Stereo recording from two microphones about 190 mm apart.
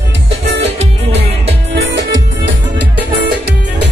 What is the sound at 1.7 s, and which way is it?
Music, 70° right (ahead or behind).